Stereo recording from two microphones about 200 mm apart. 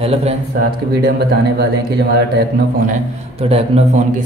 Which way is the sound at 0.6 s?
45° right (ahead or behind).